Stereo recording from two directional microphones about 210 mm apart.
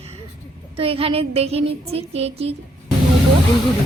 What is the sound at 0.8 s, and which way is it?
A woman's voice, 25° right (ahead or behind).